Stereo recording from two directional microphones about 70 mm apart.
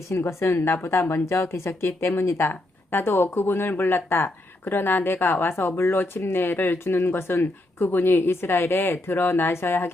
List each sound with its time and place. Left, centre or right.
0.1 s speech: left
1.0 s speech: left